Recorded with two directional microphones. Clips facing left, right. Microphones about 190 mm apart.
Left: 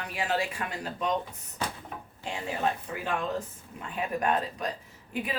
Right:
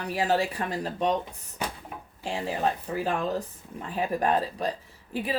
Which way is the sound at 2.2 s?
30° right (ahead or behind).